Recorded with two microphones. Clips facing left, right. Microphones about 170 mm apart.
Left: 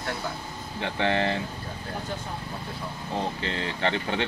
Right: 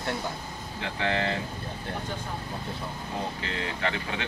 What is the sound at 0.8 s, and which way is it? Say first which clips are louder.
Speech: left 3 dB; 30° left (ahead or behind).